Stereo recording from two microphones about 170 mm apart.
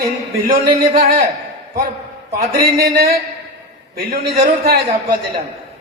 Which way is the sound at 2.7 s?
65° right (ahead or behind).